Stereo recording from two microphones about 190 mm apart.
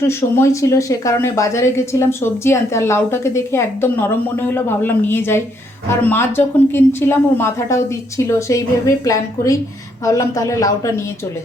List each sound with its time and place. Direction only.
0.0 s speech: 15° left (ahead or behind)